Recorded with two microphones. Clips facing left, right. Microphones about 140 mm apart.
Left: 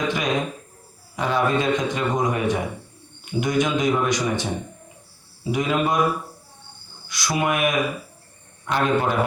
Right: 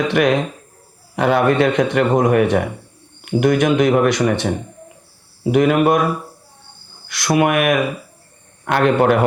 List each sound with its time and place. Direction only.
0.1 s a man's voice: 65° right (ahead or behind)
7.1 s a man's voice: 60° right (ahead or behind)